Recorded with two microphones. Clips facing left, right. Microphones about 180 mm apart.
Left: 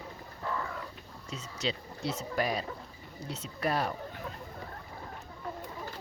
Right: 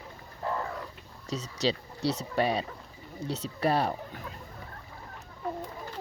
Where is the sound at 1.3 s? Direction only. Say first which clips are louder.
Right 6 dB; 35° right (ahead or behind).